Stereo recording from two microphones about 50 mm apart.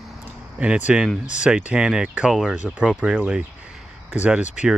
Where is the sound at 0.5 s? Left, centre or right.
Right.